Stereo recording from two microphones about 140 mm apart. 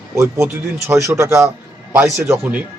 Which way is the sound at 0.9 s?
20° right (ahead or behind).